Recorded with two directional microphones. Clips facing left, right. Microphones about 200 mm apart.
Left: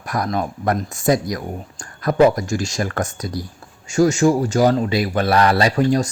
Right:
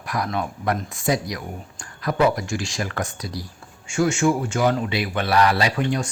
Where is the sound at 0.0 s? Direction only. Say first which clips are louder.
Left 3 dB; 45° left (ahead or behind).